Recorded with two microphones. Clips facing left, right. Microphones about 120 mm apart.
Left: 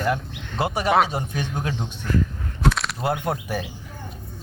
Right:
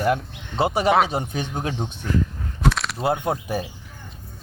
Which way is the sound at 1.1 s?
25° right (ahead or behind).